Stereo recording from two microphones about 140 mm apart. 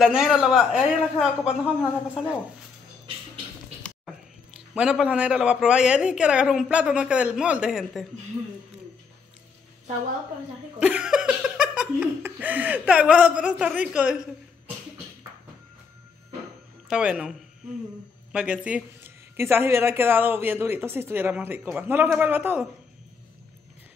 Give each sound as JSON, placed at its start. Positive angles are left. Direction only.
{"t": 0.0, "sound": "speech", "side_deg": -5}
{"t": 4.6, "sound": "speech", "side_deg": -5}
{"t": 10.8, "sound": "speech", "side_deg": -5}
{"t": 16.8, "sound": "speech", "side_deg": -10}